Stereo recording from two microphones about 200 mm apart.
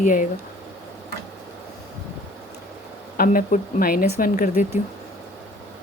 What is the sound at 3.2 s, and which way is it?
Speech, 45° left (ahead or behind).